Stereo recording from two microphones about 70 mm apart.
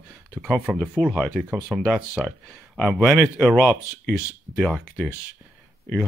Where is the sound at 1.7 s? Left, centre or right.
Centre.